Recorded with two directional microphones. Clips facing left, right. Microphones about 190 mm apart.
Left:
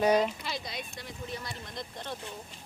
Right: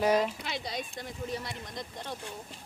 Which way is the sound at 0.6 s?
40° right (ahead or behind).